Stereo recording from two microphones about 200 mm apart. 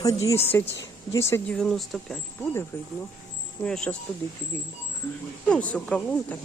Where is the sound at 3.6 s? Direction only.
5° left (ahead or behind).